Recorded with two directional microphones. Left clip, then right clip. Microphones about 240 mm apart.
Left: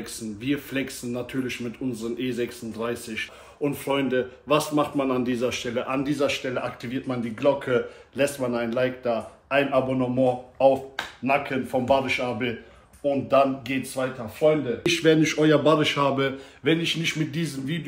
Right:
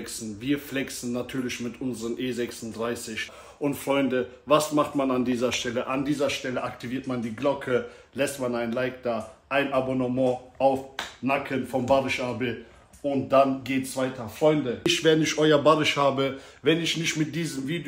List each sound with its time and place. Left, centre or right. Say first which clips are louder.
0.0 s speech: left 1 dB; centre